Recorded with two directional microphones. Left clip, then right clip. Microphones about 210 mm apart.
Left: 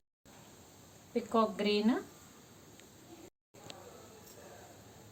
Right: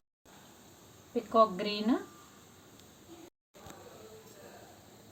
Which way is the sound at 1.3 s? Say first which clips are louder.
Right 5 dB; 45° left (ahead or behind).